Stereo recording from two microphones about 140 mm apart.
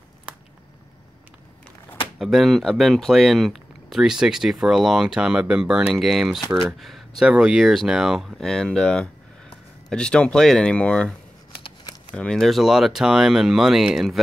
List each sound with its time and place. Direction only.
2.1 s speech: centre (ahead or behind)
11.5 s shuffling cards: 40° left (ahead or behind)
12.2 s speech: 5° left (ahead or behind)